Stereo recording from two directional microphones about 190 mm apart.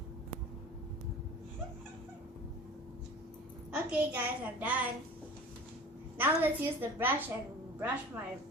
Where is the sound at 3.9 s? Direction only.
10° right (ahead or behind).